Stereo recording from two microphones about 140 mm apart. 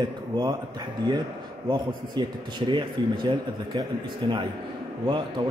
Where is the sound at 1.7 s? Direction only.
35° right (ahead or behind).